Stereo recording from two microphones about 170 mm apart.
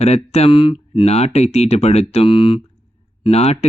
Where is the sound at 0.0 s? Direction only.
40° left (ahead or behind).